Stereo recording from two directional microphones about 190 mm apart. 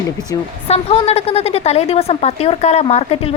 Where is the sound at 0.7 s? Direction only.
30° left (ahead or behind).